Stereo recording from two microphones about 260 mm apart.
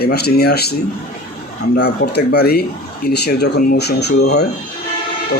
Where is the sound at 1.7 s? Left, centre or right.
Left.